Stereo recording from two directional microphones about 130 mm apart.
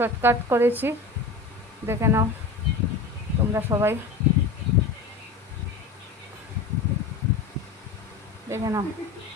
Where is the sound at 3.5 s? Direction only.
20° right (ahead or behind).